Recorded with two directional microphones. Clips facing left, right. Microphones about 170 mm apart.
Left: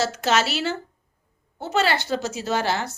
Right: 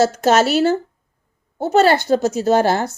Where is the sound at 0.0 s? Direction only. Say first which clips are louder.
Right 8 dB; 45° right (ahead or behind).